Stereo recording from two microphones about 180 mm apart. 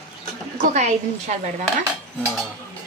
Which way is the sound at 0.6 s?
40° right (ahead or behind).